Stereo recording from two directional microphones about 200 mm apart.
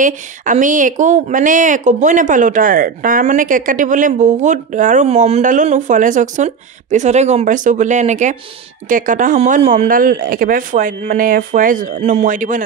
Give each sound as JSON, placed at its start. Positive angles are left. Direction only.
{"t": 0.0, "sound": "speech", "side_deg": -40}